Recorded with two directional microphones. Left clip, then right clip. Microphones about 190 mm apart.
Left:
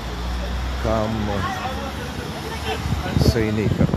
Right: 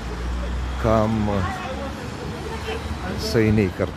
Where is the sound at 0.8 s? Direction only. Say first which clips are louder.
Right 3 dB; 40° right (ahead or behind).